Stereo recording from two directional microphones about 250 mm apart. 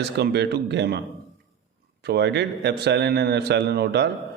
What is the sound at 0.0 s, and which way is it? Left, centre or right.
A man's voice, right.